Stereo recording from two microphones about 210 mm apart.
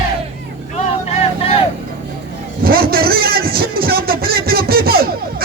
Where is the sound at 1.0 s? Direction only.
30° left (ahead or behind).